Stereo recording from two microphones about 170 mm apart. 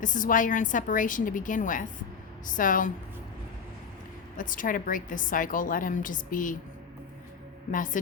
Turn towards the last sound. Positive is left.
turn(degrees=50)  # may be behind; listen again after turning